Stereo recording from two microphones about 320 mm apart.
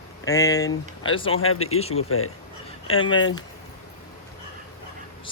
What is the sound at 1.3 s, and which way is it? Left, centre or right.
Speech, left.